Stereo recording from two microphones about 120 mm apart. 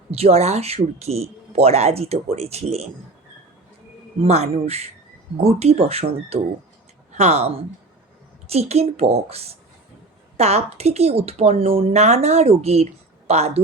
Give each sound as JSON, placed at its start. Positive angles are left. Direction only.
{"t": 0.1, "sound": "speech", "side_deg": -55}
{"t": 4.2, "sound": "speech", "side_deg": -60}